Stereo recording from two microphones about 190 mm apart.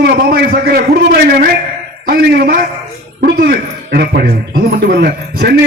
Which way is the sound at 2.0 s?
50° right (ahead or behind).